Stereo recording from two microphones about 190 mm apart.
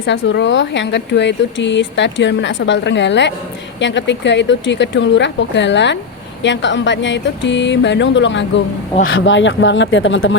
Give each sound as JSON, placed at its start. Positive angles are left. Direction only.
{"t": 0.0, "sound": "speech", "side_deg": 70}
{"t": 9.0, "sound": "speech", "side_deg": 85}